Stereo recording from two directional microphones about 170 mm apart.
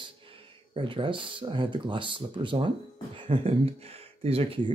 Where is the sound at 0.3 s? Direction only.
30° right (ahead or behind).